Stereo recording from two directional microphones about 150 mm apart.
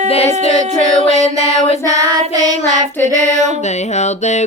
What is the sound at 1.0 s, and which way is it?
Music, 50° right (ahead or behind).